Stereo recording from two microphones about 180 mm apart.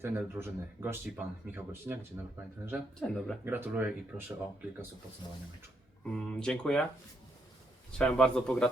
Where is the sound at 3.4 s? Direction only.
10° right (ahead or behind).